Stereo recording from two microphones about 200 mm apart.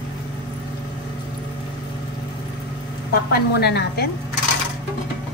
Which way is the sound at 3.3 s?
55° left (ahead or behind).